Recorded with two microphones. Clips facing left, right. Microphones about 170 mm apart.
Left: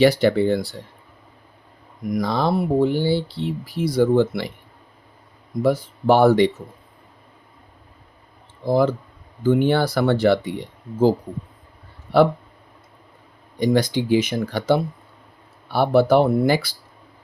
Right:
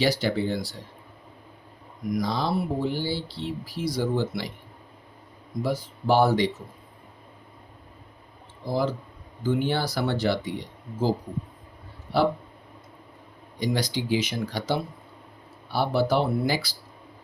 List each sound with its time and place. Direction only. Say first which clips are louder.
0.0 s speech: left 8 dB; 60° left (ahead or behind)
2.1 s speech: left 5 dB; 55° left (ahead or behind)
5.6 s speech: left 8 dB; 60° left (ahead or behind)
8.6 s speech: left 8 dB; 55° left (ahead or behind)
13.6 s speech: left 8 dB; 55° left (ahead or behind)